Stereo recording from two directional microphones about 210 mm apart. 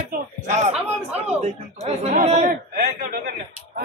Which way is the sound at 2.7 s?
50° right (ahead or behind).